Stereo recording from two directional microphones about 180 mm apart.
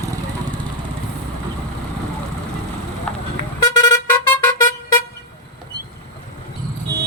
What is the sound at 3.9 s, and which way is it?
Vehicle horn, 15° left (ahead or behind).